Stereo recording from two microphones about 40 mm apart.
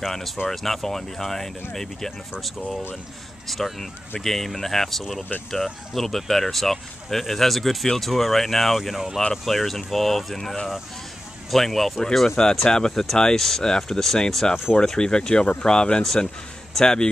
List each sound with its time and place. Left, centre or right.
0.0 s speech: centre
3.4 s speech: centre
12.4 s speech: centre